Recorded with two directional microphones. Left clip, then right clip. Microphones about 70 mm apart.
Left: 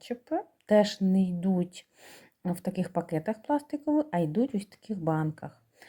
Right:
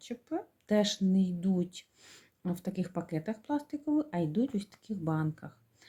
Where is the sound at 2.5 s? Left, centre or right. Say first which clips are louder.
Left 5 dB; left.